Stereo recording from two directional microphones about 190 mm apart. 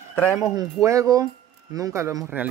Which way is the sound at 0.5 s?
15° right (ahead or behind).